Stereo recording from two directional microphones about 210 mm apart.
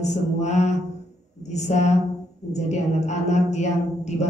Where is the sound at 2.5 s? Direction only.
35° left (ahead or behind).